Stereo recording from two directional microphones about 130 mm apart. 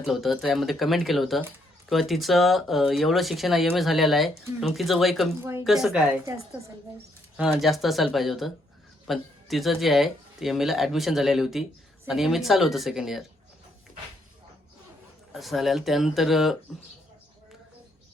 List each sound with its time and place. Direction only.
0.0 s speech: centre (ahead or behind)
5.4 s speech: 20° right (ahead or behind)
5.6 s speech: 5° right (ahead or behind)
7.3 s speech: 5° right (ahead or behind)
15.3 s speech: centre (ahead or behind)